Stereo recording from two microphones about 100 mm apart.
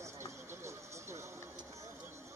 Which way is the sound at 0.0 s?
30° right (ahead or behind).